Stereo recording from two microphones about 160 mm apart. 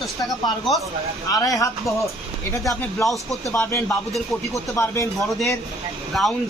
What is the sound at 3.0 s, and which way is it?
Speech, centre (ahead or behind).